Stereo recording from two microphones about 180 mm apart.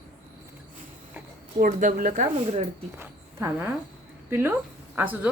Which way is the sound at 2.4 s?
35° right (ahead or behind).